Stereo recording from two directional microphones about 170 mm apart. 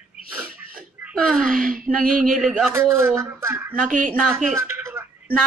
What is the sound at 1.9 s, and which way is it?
A man's voice, 10° right (ahead or behind).